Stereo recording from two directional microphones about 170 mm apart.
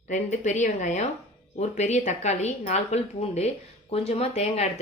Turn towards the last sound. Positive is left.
turn(degrees=40)  # may be behind; listen again after turning